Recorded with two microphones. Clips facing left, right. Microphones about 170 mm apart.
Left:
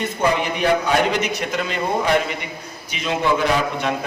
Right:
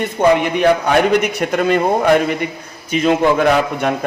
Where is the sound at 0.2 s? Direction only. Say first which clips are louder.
Right 7 dB; 55° right (ahead or behind).